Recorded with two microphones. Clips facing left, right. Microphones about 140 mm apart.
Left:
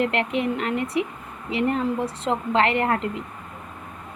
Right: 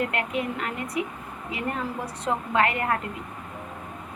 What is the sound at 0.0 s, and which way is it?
A woman's voice, 25° left (ahead or behind).